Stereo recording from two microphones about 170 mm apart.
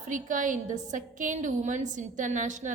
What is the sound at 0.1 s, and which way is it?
A woman's voice, 50° right (ahead or behind).